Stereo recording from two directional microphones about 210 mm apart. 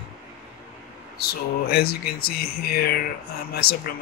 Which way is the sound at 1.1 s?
45° left (ahead or behind).